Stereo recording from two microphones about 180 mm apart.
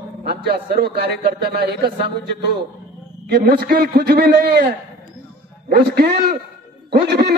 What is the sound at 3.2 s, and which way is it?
A man's voice, 65° right (ahead or behind).